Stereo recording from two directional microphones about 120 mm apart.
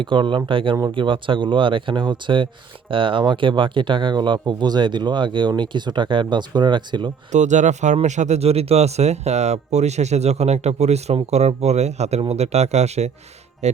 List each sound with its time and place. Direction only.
0.0 s speech: 45° right (ahead or behind)
7.3 s speech: 85° right; by 13.1 s 65° right (ahead or behind)